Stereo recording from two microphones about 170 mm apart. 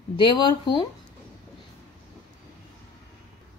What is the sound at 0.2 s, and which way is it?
Speech, 25° left (ahead or behind).